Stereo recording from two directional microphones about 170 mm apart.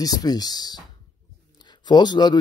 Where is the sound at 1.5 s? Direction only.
25° left (ahead or behind).